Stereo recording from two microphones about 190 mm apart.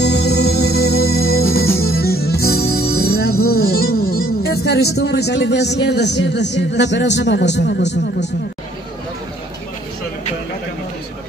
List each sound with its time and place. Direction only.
0.0 s music: 60° left (ahead or behind)
3.4 s speech: 55° left (ahead or behind)